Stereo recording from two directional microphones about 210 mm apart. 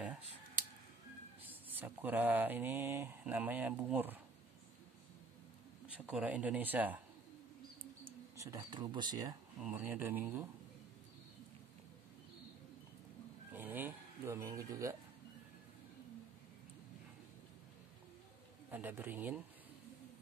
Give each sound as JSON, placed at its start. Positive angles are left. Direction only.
{"t": 1.7, "sound": "speech", "side_deg": -10}
{"t": 5.9, "sound": "speech", "side_deg": -5}
{"t": 8.0, "sound": "speech", "side_deg": -15}
{"t": 9.6, "sound": "speech", "side_deg": -5}
{"t": 13.5, "sound": "speech", "side_deg": -10}
{"t": 18.7, "sound": "speech", "side_deg": -10}